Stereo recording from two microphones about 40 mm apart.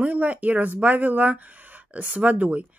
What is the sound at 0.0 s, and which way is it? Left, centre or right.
Speech, right.